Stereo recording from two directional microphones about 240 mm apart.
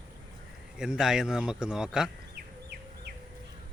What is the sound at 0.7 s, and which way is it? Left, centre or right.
Speech, centre.